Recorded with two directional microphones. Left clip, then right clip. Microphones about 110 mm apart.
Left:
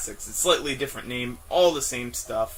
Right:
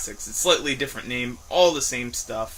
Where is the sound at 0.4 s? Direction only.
20° right (ahead or behind).